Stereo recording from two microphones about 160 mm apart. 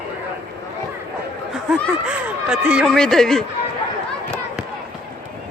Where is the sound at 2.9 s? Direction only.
5° left (ahead or behind).